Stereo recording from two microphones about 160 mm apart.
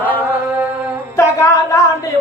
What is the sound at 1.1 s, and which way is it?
Speech, 20° left (ahead or behind).